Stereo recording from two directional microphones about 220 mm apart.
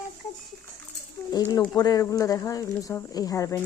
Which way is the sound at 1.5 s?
15° left (ahead or behind).